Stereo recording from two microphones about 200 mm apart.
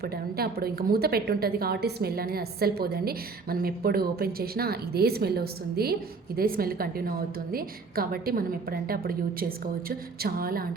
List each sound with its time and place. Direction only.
0.0 s a woman's voice: 50° right (ahead or behind)